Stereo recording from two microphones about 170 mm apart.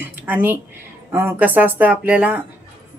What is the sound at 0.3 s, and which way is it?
Speech, 10° right (ahead or behind).